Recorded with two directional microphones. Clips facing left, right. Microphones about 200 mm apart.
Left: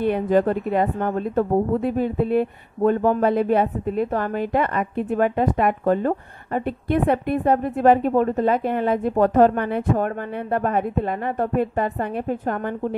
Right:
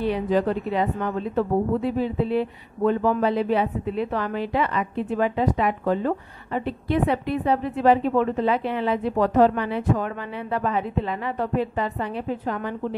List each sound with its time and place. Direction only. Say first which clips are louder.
0.0 s a woman's voice: left 3 dB; 50° left (ahead or behind)